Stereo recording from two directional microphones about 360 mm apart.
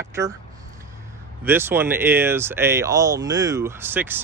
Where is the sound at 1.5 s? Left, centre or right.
Centre.